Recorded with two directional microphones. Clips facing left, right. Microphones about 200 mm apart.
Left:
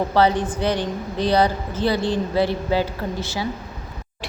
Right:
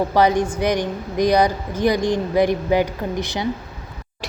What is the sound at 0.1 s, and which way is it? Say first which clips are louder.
A woman's voice: right 1 dB; 15° right (ahead or behind).